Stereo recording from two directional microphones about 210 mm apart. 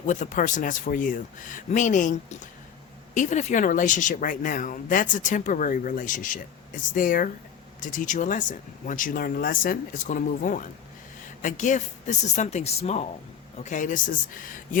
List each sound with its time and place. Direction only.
0.1 s speech: 35° left (ahead or behind)